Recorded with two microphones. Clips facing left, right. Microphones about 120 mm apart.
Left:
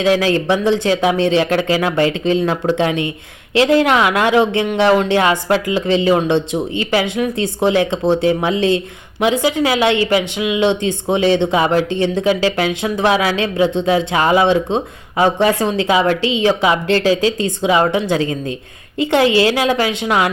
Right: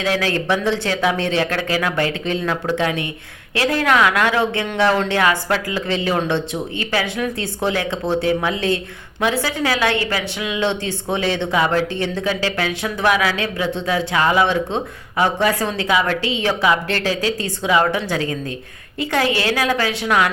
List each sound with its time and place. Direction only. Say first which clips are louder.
0.0 s a woman's voice: left 6 dB; 20° left (ahead or behind)